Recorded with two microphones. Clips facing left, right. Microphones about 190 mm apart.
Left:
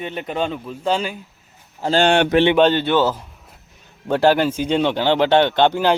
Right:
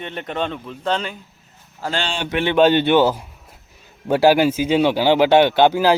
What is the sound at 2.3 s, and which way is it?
Speech, 40° left (ahead or behind).